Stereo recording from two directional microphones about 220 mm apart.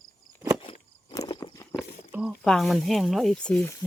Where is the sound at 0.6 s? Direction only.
25° left (ahead or behind).